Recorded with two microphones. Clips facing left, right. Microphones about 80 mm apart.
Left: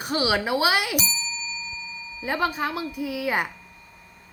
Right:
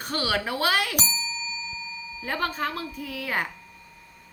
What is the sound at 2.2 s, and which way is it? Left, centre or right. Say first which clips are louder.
A woman's voice: left 3 dB; centre.